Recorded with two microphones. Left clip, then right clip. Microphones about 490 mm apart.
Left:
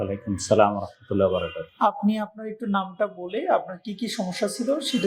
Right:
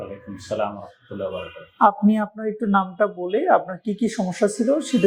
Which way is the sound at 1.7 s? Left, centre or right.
Right.